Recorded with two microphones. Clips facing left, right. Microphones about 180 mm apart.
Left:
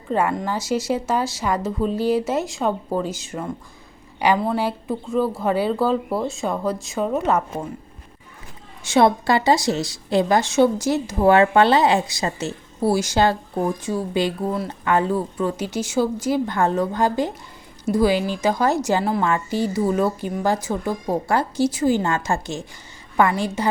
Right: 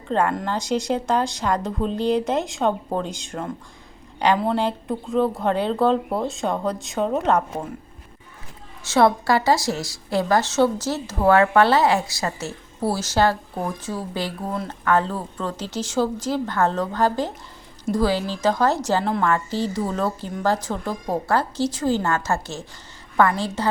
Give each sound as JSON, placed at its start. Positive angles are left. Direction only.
{"t": 0.1, "sound": "a woman's voice", "side_deg": 5}
{"t": 8.8, "sound": "a woman's voice", "side_deg": 15}
{"t": 14.5, "sound": "a woman's voice", "side_deg": 5}